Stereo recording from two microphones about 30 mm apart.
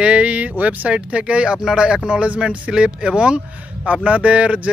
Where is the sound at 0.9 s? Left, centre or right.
Right.